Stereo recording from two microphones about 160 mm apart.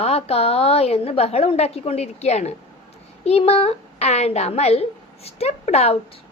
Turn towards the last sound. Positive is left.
turn(degrees=40)  # may be behind; listen again after turning